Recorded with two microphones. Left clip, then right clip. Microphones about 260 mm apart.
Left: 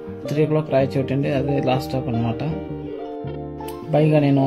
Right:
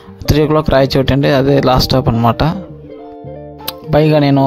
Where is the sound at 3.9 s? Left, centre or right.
Right.